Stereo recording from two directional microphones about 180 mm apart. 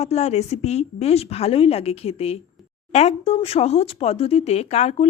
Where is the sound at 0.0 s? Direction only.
35° left (ahead or behind).